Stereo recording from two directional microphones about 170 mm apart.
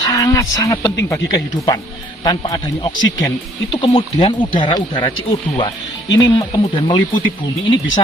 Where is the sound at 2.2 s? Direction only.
25° left (ahead or behind).